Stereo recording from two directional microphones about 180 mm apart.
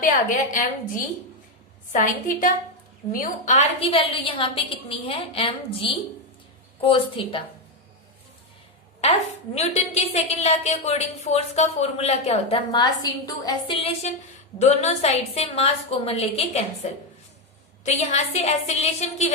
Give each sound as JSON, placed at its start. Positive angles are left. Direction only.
{"t": 0.0, "sound": "a woman's voice", "side_deg": 45}
{"t": 9.6, "sound": "a woman's voice", "side_deg": 35}
{"t": 17.8, "sound": "a woman's voice", "side_deg": 35}